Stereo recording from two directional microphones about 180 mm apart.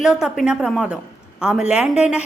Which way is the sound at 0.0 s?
5° right (ahead or behind).